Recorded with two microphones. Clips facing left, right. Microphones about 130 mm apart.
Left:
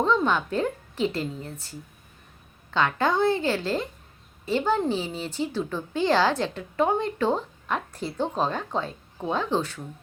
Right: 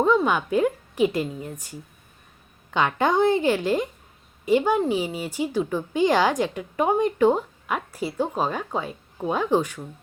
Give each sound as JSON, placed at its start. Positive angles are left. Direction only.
{"t": 0.0, "sound": "speech", "side_deg": -10}